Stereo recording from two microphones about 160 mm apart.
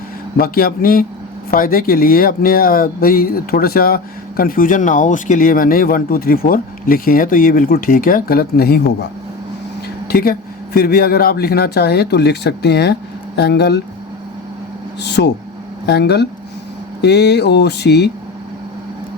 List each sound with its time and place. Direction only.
0.3 s a man's voice: 70° left (ahead or behind)
10.1 s speech: 70° left (ahead or behind); by 13.8 s 90° left
15.0 s speech: 90° left